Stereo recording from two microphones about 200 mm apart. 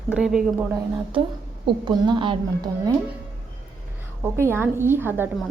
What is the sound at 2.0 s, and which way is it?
Speech, 25° right (ahead or behind).